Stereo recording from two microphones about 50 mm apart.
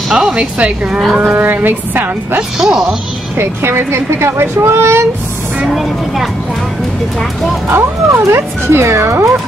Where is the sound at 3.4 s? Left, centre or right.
Right.